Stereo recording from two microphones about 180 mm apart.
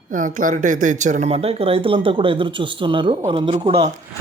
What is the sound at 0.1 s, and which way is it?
Speech, 45° right (ahead or behind).